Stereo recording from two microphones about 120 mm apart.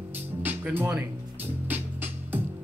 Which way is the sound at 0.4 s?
15° right (ahead or behind).